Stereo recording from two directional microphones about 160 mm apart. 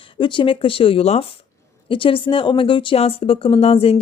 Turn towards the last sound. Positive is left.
turn(degrees=35)  # may be behind; listen again after turning